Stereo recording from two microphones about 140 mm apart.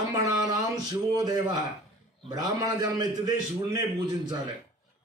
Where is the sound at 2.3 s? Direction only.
30° right (ahead or behind).